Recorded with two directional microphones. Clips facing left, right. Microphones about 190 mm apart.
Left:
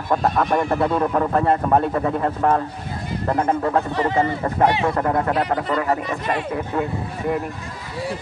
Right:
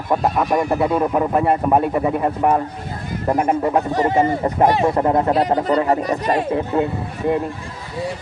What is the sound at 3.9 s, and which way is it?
Speech, 45° right (ahead or behind).